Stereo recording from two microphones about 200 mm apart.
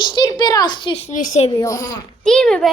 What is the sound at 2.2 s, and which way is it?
Speech, 5° left (ahead or behind).